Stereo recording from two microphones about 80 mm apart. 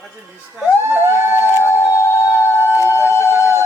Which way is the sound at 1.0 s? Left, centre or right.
Right.